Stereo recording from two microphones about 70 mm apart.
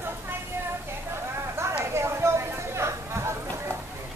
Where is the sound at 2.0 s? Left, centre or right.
Right.